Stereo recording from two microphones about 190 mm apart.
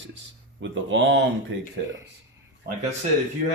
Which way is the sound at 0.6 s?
75° right (ahead or behind).